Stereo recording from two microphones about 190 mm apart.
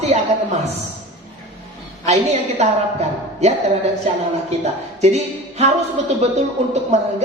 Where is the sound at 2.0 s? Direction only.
35° right (ahead or behind).